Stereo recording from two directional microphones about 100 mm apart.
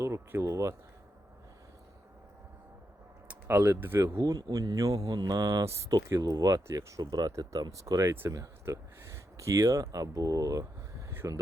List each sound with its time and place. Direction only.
0.0 s speech: 25° right (ahead or behind)
3.2 s speech: 20° right (ahead or behind)
4.0 s speech: 35° right (ahead or behind)